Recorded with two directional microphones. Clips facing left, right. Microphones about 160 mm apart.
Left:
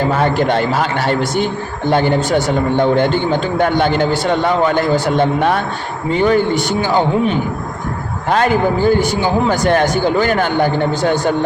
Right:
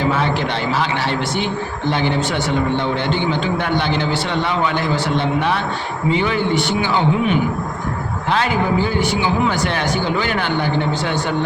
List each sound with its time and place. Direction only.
0.1 s speech: 45° left (ahead or behind)